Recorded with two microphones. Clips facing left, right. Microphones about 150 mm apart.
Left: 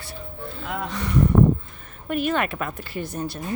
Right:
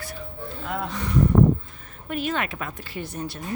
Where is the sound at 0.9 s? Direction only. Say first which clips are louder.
Left 1 dB; 70° left (ahead or behind).